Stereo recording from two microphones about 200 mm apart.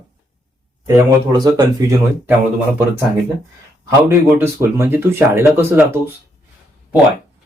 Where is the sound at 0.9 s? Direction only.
15° right (ahead or behind).